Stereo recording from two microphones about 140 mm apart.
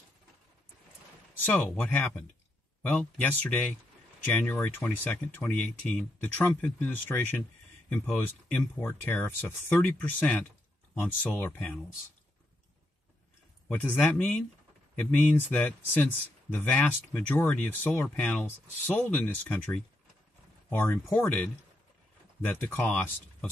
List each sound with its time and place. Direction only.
1.4 s speech: 10° left (ahead or behind)
13.7 s speech: 10° left (ahead or behind)
22.5 s speech: 10° left (ahead or behind)